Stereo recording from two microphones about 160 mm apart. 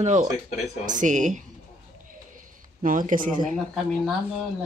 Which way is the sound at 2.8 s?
55° right (ahead or behind).